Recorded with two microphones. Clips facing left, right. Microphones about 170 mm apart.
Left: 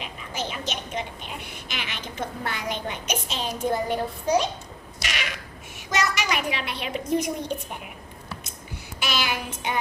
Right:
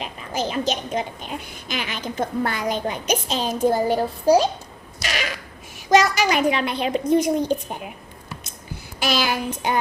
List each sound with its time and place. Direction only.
0.0 s a woman's voice: 35° right (ahead or behind)
5.0 s a sound: 35° right (ahead or behind)
6.1 s a woman's voice: 35° right (ahead or behind)
9.0 s a woman's voice: 35° right (ahead or behind)